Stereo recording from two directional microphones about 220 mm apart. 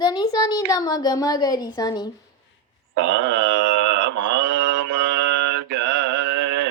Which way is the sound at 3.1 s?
55° right (ahead or behind).